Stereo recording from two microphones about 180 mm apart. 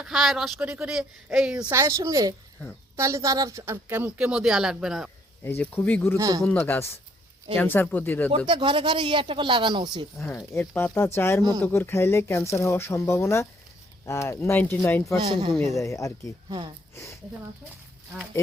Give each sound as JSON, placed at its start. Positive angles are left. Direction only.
{"t": 0.0, "sound": "a woman's voice", "side_deg": 0}
{"t": 5.4, "sound": "speech", "side_deg": 10}
{"t": 6.1, "sound": "speech", "side_deg": -20}
{"t": 6.4, "sound": "speech", "side_deg": 10}
{"t": 8.4, "sound": "speech", "side_deg": -30}
{"t": 10.2, "sound": "speech", "side_deg": 15}
{"t": 15.3, "sound": "speech", "side_deg": -25}
{"t": 15.7, "sound": "speech", "side_deg": 15}
{"t": 16.5, "sound": "speech", "side_deg": -20}
{"t": 16.9, "sound": "speech", "side_deg": 15}